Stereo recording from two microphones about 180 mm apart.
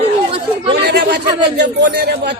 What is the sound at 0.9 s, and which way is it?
Speech, 65° right (ahead or behind).